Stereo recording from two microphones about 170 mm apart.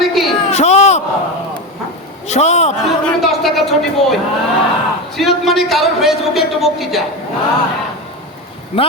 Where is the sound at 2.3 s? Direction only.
40° left (ahead or behind).